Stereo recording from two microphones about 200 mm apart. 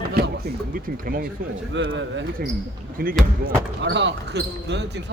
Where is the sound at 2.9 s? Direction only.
45° right (ahead or behind).